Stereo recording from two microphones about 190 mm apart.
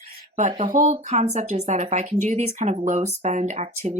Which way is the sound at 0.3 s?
35° right (ahead or behind).